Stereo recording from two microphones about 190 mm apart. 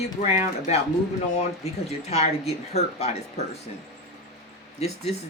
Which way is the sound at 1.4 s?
35° left (ahead or behind).